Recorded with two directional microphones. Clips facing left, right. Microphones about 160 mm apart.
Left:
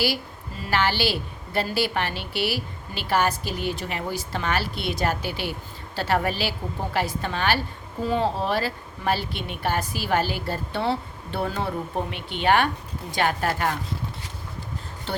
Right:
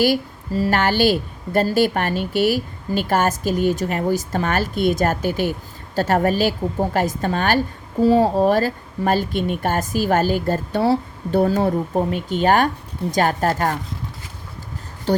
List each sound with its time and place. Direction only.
0.0 s speech: 40° right (ahead or behind)